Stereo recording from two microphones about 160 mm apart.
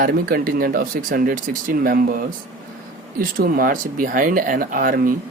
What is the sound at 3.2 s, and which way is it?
Speech, 65° right (ahead or behind).